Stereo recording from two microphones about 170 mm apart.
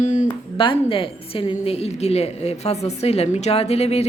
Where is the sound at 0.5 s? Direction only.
30° left (ahead or behind).